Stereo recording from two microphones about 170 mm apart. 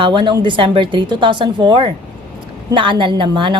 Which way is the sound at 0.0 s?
30° right (ahead or behind).